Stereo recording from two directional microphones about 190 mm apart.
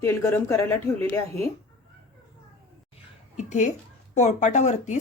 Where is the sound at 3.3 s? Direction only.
40° left (ahead or behind).